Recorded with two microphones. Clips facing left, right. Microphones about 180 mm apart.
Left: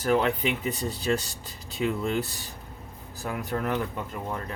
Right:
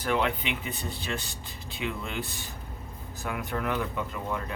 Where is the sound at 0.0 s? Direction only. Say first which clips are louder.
Left 4 dB; 40° left (ahead or behind).